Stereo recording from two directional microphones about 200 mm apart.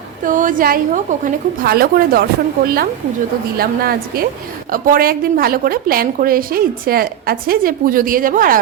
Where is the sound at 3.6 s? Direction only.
50° right (ahead or behind).